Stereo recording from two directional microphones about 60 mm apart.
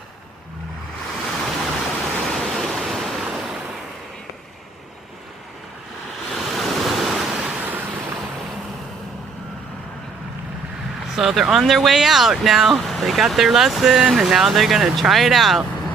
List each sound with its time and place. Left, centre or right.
1.3 s waves: centre
6.3 s waves: centre
7.3 s waves: centre
11.2 s speech: centre